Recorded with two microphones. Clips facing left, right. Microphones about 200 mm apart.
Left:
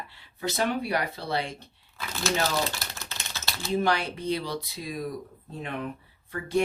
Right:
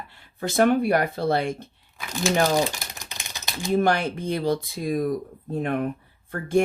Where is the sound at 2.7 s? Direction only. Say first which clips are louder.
Even; 15° right (ahead or behind).